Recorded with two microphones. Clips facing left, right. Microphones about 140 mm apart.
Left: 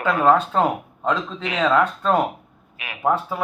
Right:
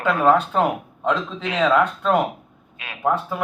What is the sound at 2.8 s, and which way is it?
Speech, 10° left (ahead or behind).